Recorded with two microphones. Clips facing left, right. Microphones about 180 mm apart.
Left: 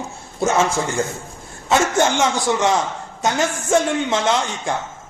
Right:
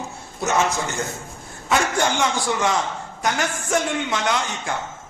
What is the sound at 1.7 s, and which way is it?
A man's voice, 25° left (ahead or behind).